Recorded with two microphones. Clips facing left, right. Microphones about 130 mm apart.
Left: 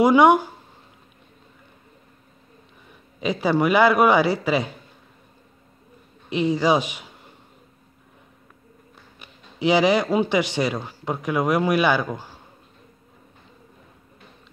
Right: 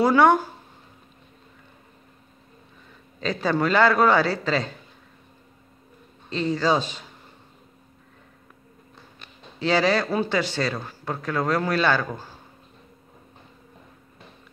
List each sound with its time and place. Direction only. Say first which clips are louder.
0.0 s speech: left 3 dB; 15° left (ahead or behind)
2.9 s speech: left 3 dB; 15° left (ahead or behind)
6.3 s speech: left 3 dB; 15° left (ahead or behind)
9.2 s speech: left 5 dB; 15° left (ahead or behind)